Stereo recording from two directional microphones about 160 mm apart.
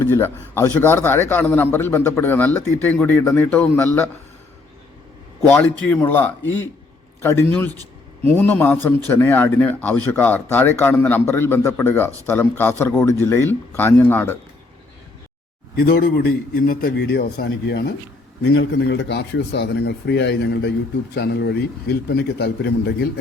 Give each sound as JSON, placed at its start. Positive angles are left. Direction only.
{"t": 0.0, "sound": "speech", "side_deg": 15}
{"t": 5.5, "sound": "speech", "side_deg": 10}
{"t": 15.7, "sound": "a man's voice", "side_deg": 70}